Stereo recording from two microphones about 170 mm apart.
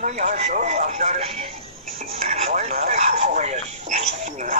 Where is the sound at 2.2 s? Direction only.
35° right (ahead or behind).